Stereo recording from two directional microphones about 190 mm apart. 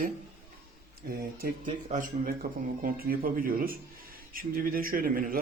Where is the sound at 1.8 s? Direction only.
40° right (ahead or behind).